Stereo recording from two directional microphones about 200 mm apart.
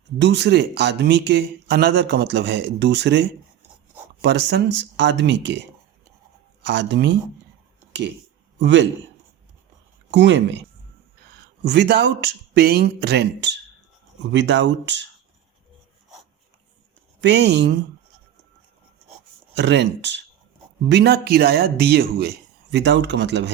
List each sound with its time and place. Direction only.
0.2 s speech: 55° right (ahead or behind)
6.7 s speech: 60° right (ahead or behind)
8.6 s speech: 65° right (ahead or behind)
10.1 s speech: 65° right (ahead or behind)
11.6 s speech: 60° right (ahead or behind)
17.2 s speech: 60° right (ahead or behind)
19.5 s speech: 60° right (ahead or behind)